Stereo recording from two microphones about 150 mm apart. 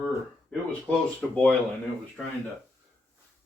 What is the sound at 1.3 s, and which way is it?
Speech, 5° left (ahead or behind).